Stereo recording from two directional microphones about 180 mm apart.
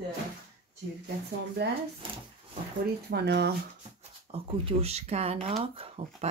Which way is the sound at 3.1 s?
65° right (ahead or behind).